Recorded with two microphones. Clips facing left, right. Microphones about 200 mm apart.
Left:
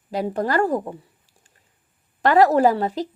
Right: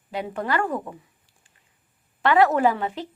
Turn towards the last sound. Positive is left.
turn(degrees=35)  # may be behind; listen again after turning